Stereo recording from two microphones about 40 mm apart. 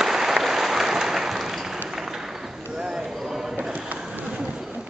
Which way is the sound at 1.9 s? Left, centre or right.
Centre.